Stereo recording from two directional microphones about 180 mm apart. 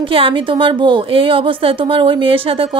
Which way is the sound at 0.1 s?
30° right (ahead or behind).